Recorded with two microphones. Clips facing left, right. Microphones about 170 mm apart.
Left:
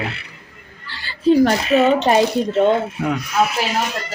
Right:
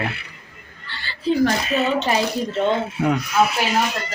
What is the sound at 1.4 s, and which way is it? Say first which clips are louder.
Speech: left 5 dB; 65° left (ahead or behind).